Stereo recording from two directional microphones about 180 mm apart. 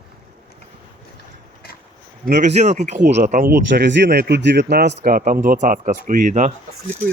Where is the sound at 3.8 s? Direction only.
75° right (ahead or behind).